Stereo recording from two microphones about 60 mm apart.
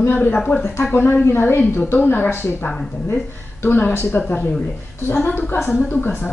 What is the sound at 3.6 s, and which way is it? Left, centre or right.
A woman's voice, left.